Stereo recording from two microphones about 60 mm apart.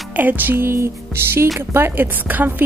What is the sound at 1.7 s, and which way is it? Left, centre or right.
Speech, right.